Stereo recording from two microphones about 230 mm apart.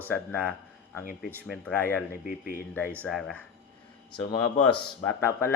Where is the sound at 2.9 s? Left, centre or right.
Centre.